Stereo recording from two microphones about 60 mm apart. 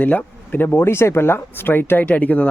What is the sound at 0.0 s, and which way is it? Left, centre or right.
Speech, left.